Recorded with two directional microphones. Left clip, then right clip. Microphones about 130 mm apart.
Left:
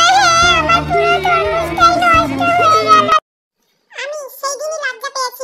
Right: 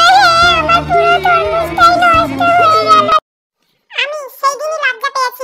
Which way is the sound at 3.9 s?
80° right.